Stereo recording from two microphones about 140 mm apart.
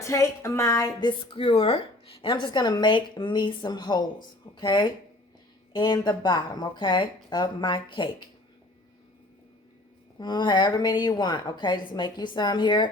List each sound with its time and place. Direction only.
0.0 s speech: 20° left (ahead or behind)
10.2 s speech: 30° left (ahead or behind)